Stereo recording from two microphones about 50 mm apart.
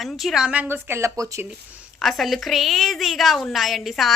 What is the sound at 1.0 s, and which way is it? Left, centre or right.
Speech, right.